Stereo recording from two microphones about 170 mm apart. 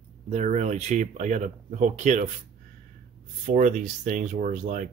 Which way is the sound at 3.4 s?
50° right (ahead or behind).